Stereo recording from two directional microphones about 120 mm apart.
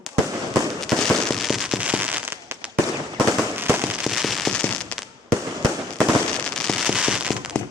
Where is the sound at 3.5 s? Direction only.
20° right (ahead or behind).